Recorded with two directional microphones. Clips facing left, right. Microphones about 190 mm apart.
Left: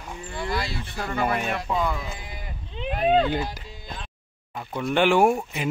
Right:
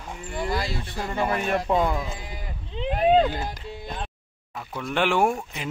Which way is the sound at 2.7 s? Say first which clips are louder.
Right 2 dB; 25° right (ahead or behind).